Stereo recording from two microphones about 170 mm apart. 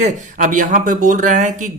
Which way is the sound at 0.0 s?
45° right (ahead or behind).